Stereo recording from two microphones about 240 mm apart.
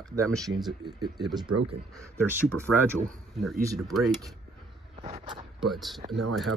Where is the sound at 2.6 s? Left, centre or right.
Centre.